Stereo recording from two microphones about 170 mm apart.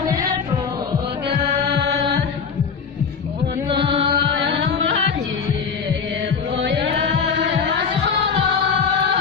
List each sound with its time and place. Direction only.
1.3 s music: 70° right (ahead or behind)
3.7 s music: 30° right (ahead or behind)
4.3 s music: 90° right
6.6 s music: 90° right